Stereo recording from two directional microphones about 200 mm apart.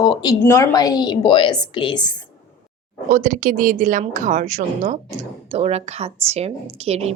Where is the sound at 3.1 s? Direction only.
40° right (ahead or behind).